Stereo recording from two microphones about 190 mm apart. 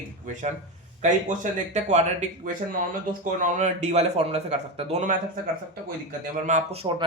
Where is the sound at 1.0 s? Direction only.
40° right (ahead or behind).